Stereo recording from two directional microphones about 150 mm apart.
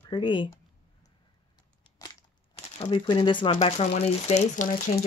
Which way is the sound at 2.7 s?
35° left (ahead or behind).